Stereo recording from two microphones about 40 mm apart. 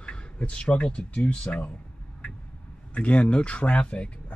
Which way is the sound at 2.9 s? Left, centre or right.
Left.